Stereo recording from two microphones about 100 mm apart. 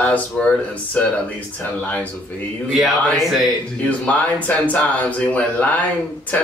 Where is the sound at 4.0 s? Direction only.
15° left (ahead or behind).